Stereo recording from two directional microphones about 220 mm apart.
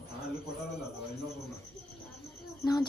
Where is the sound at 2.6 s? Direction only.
20° left (ahead or behind).